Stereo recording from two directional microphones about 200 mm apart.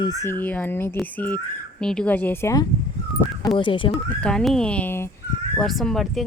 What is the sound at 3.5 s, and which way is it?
Speech, 25° left (ahead or behind).